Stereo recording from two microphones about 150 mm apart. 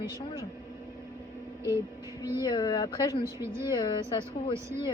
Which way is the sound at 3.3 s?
15° right (ahead or behind).